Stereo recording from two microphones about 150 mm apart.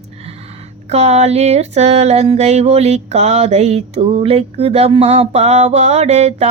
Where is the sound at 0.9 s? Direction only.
50° right (ahead or behind).